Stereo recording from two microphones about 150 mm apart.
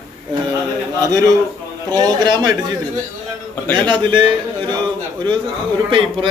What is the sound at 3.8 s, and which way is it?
Speech, 35° right (ahead or behind).